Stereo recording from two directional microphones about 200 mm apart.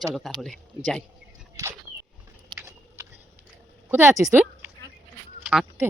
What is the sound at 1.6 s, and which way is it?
Speech, 15° right (ahead or behind).